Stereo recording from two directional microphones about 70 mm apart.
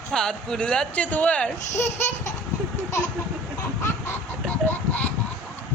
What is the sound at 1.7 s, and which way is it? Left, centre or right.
Laughter, left.